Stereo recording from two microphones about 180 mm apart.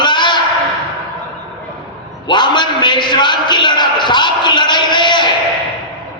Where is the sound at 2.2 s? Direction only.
25° left (ahead or behind).